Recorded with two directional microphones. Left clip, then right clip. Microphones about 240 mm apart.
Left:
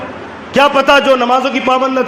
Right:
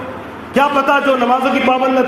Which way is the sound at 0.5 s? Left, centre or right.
Left.